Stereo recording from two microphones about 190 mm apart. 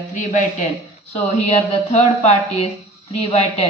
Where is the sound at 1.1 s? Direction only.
35° left (ahead or behind).